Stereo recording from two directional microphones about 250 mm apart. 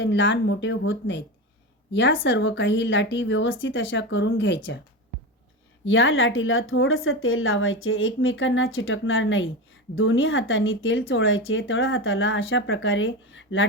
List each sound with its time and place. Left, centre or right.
0.0 s speech: left
5.8 s speech: left